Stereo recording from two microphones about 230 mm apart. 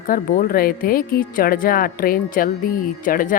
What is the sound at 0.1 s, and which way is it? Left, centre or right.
Speech, left.